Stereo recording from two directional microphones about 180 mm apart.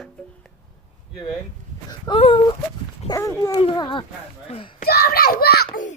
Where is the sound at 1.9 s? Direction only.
30° left (ahead or behind).